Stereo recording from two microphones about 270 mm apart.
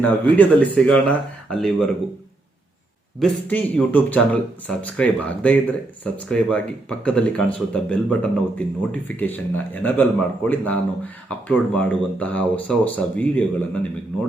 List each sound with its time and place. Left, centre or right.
0.0 s speech: centre
3.2 s speech: centre